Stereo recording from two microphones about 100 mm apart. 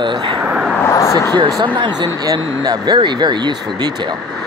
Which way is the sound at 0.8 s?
30° left (ahead or behind).